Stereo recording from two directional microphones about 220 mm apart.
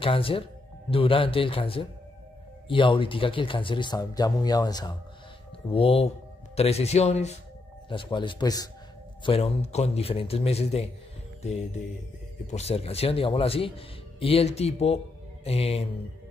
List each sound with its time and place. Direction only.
0.0 s speech: 25° left (ahead or behind)
12.4 s speech: 30° left (ahead or behind)